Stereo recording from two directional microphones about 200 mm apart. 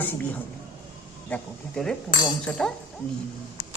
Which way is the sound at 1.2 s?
5° left (ahead or behind).